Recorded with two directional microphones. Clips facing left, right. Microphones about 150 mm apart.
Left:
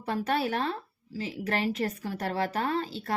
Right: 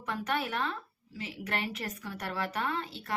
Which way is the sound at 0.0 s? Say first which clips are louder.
Left 5 dB; 30° left (ahead or behind).